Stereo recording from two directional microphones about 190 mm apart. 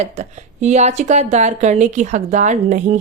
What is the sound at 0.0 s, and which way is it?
A woman's voice, 35° right (ahead or behind).